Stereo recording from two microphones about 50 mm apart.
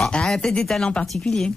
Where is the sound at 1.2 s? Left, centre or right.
Centre.